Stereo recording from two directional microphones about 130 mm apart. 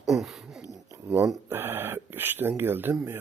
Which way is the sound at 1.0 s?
20° right (ahead or behind).